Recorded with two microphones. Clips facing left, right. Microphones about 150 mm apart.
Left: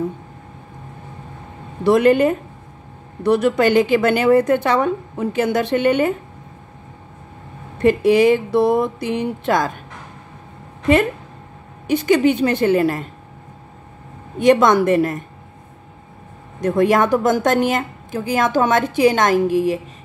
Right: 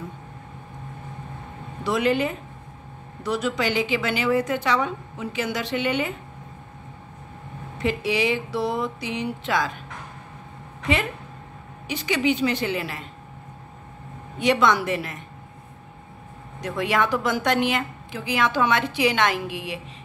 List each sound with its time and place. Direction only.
1.9 s a woman's voice: 55° left (ahead or behind)
7.8 s a woman's voice: 50° left (ahead or behind)
11.9 s a woman's voice: 50° left (ahead or behind)
14.4 s a woman's voice: 45° left (ahead or behind)
16.6 s a woman's voice: 45° left (ahead or behind)